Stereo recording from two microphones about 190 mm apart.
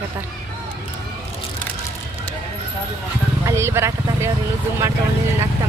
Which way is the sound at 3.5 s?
15° right (ahead or behind).